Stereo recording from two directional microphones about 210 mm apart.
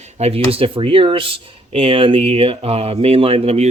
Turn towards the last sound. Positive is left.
turn(degrees=-30)  # may be behind; listen again after turning